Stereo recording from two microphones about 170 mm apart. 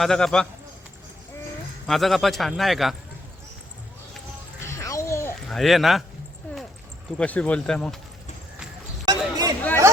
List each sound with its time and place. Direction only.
0.0 s speech: 5° left (ahead or behind)
1.9 s speech: centre (ahead or behind)
4.6 s music: 15° left (ahead or behind)
5.5 s speech: centre (ahead or behind)
7.2 s speech: 10° left (ahead or behind)
9.0 s a sound: 20° right (ahead or behind)
9.6 s chatter: 10° left (ahead or behind)